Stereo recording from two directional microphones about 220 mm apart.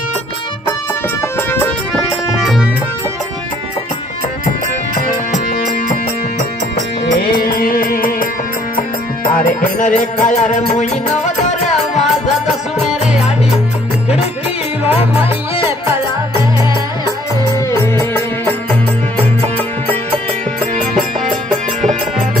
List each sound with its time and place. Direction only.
1.5 s music: 5° left (ahead or behind)
7.3 s music: 40° left (ahead or behind)
18.4 s music: 5° left (ahead or behind)